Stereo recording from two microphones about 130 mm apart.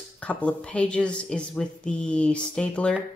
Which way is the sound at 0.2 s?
10° left (ahead or behind).